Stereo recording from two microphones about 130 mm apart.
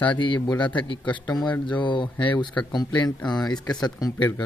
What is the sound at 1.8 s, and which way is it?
Speech, 40° left (ahead or behind).